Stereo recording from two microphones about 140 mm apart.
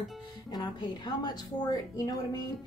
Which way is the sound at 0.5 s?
30° left (ahead or behind).